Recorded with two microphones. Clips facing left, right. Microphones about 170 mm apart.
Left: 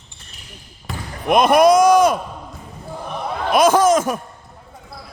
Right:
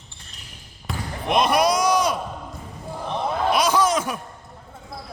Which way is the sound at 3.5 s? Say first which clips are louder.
Left 8 dB; 50° left (ahead or behind).